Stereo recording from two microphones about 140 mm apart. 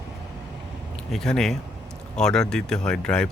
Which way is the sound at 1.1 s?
5° left (ahead or behind).